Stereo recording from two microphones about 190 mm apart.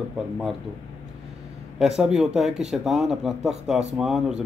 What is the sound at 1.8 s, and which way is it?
Speech, 5° right (ahead or behind).